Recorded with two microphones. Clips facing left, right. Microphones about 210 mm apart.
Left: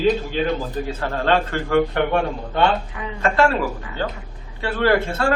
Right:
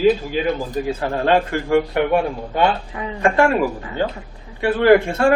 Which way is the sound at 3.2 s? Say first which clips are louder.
Right 2 dB; 15° right (ahead or behind).